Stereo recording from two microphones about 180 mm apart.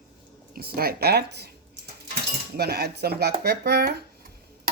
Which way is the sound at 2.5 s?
60° right (ahead or behind).